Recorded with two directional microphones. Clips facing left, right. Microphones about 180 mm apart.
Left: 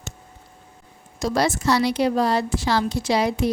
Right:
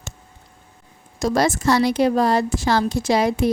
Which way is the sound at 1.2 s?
45° right (ahead or behind).